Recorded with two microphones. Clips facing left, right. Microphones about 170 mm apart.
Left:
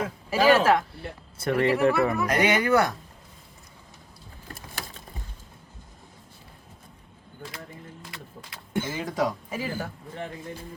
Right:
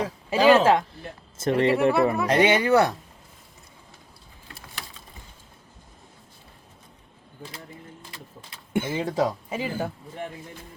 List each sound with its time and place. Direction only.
0.0 s speech: 25° right (ahead or behind)
8.8 s speech: 30° right (ahead or behind)